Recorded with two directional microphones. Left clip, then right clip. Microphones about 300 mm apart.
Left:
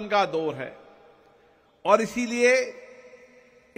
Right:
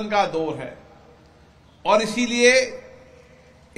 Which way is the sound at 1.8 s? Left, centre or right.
Left.